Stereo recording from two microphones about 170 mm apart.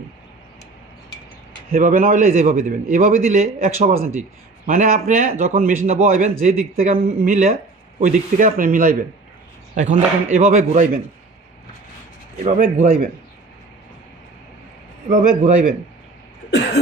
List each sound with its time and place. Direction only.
1.7 s a man's voice: 55° right (ahead or behind)
12.5 s speech: 50° right (ahead or behind)
15.1 s a man's voice: 50° right (ahead or behind)